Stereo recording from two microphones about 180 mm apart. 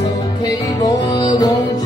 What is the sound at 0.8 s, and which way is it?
Music, 20° left (ahead or behind).